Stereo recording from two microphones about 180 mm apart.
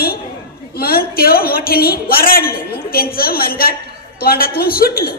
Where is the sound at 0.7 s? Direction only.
55° left (ahead or behind).